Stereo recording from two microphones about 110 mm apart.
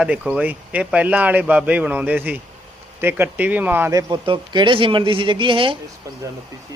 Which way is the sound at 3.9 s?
35° right (ahead or behind).